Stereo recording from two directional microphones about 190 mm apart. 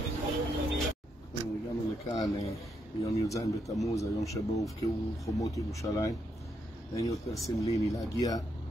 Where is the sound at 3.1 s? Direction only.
15° left (ahead or behind).